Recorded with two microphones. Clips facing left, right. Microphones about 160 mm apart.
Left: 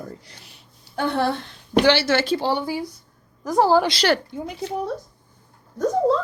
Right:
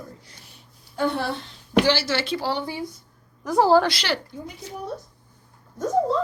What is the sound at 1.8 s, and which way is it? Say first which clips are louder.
Speech: left 4 dB; 70° left (ahead or behind).